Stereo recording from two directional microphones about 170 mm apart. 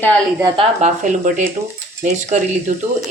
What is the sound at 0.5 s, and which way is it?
Speech, 45° right (ahead or behind).